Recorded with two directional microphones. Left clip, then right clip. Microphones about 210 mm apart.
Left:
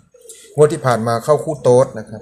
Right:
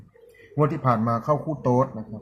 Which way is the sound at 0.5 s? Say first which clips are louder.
Left 9 dB; 40° left (ahead or behind).